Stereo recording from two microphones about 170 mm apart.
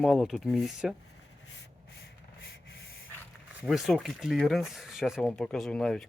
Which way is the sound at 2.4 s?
80° left.